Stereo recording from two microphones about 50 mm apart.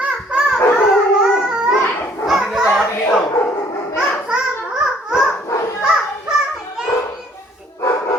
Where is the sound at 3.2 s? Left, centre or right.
Left.